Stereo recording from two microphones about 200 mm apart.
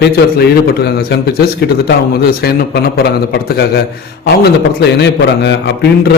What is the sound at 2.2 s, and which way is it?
A man's voice, 50° left (ahead or behind).